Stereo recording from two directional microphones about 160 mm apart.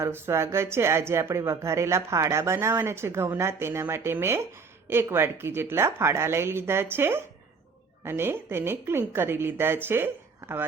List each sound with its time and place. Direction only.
0.0 s speech: 15° right (ahead or behind)